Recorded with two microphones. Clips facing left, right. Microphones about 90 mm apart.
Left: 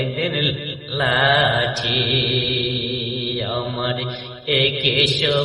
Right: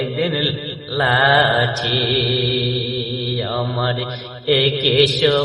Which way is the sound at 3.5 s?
35° right (ahead or behind).